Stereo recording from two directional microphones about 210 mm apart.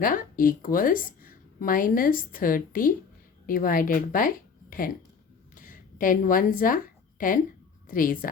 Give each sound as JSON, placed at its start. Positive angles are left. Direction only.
{"t": 0.0, "sound": "a woman's voice", "side_deg": 40}
{"t": 5.5, "sound": "a sound", "side_deg": 40}
{"t": 7.9, "sound": "a woman's voice", "side_deg": 40}